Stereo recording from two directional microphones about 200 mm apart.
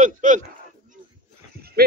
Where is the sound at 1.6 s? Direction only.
50° right (ahead or behind).